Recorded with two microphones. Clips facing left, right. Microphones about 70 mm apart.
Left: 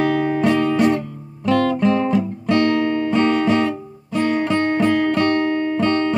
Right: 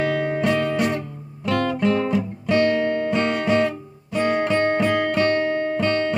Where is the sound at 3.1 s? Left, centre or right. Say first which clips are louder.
Left 4 dB; centre.